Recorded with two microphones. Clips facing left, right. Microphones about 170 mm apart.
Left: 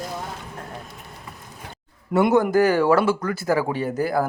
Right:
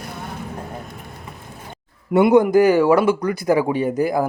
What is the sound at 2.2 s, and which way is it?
Speech, 10° right (ahead or behind).